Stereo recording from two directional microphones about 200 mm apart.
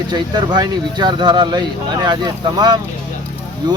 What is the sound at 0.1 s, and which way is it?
Speech, 20° right (ahead or behind).